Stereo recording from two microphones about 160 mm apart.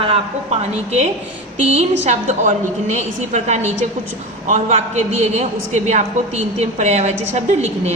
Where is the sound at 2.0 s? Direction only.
45° right (ahead or behind).